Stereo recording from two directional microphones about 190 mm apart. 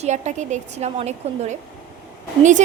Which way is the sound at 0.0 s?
40° right (ahead or behind).